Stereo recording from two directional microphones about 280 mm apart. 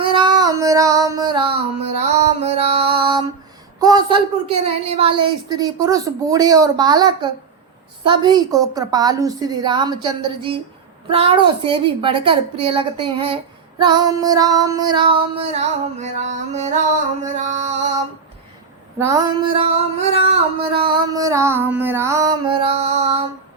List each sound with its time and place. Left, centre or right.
0.0 s child singing: centre
3.8 s a woman's voice: centre
18.9 s a woman's voice: centre